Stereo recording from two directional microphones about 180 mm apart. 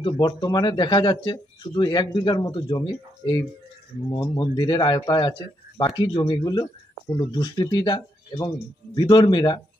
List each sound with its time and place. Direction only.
0.0 s speech: 25° left (ahead or behind)